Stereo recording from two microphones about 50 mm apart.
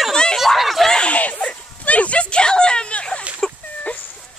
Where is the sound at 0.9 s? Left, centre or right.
Left.